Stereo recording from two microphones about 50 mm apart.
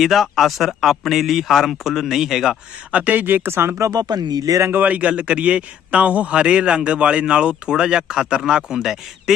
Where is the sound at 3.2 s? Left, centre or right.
Right.